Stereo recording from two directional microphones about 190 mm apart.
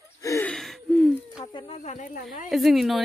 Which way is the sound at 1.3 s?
25° left (ahead or behind).